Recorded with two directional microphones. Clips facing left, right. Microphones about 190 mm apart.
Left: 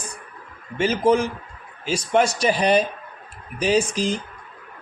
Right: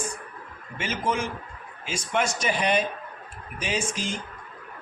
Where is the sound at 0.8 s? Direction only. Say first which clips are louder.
Left 9 dB; 35° left (ahead or behind).